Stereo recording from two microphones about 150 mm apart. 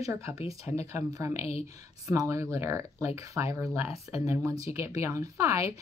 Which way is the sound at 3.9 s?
45° left (ahead or behind).